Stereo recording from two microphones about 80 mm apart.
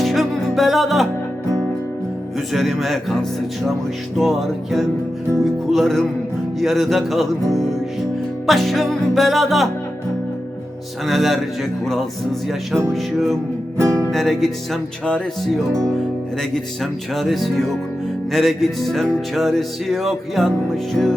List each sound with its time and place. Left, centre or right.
0.0 s music: centre
2.5 s music: centre
8.4 s music: centre
11.0 s music: centre
12.9 s music: centre
13.7 s music: right
14.1 s music: centre
17.2 s music: centre